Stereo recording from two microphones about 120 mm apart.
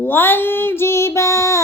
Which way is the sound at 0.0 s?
15° left (ahead or behind).